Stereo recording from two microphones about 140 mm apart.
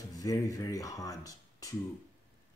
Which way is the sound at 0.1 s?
25° left (ahead or behind).